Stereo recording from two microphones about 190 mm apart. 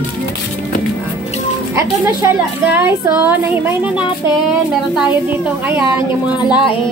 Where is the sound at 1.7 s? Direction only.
15° right (ahead or behind).